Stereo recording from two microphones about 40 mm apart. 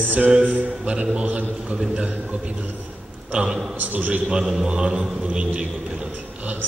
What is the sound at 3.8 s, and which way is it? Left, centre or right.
Speech, right.